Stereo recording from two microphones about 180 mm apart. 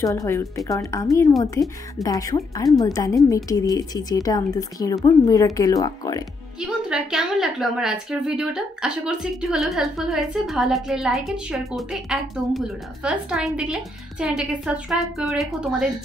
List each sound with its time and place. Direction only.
0.0 s a woman's voice: 15° left (ahead or behind)
6.6 s a woman's voice: 5° right (ahead or behind)